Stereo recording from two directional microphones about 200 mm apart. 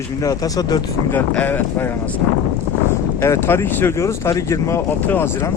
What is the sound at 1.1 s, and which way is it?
Speech, 10° left (ahead or behind).